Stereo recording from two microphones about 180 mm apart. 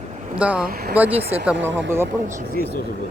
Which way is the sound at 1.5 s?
90° right.